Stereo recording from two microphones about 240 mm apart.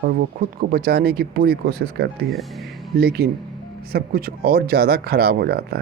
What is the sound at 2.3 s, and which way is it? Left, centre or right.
Speech, centre.